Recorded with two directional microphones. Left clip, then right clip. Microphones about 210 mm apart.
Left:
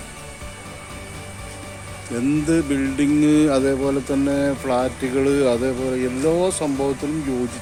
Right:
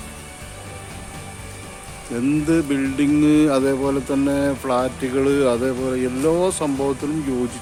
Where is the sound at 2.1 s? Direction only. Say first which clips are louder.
Right 1 dB; centre (ahead or behind).